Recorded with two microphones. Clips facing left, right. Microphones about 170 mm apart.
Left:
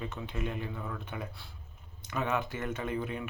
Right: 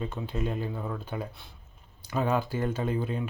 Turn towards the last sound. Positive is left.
turn(degrees=-30)  # may be behind; listen again after turning